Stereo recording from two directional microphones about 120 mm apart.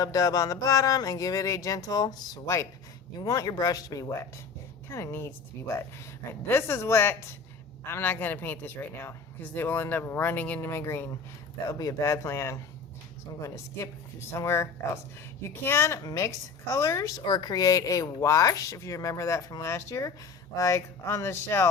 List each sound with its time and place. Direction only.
0.0 s a woman's voice: 30° left (ahead or behind)
11.7 s a woman's voice: 30° left (ahead or behind)